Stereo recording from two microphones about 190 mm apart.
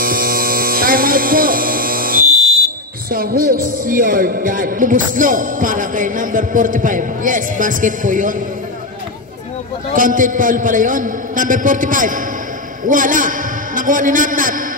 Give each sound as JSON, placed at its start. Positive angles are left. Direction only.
{"t": 0.0, "sound": "hum", "side_deg": -50}
{"t": 3.1, "sound": "a man's voice", "side_deg": -50}
{"t": 9.9, "sound": "a man's voice", "side_deg": -45}